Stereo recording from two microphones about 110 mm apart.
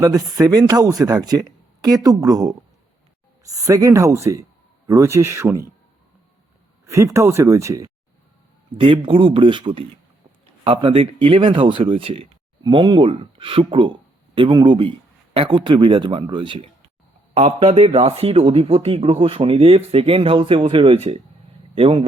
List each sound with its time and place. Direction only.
0.0 s speech: 30° right (ahead or behind)
6.8 s speech: 25° right (ahead or behind)
8.8 s speech: 50° right (ahead or behind)
12.6 s speech: 45° right (ahead or behind); by 21.2 s 65° right (ahead or behind)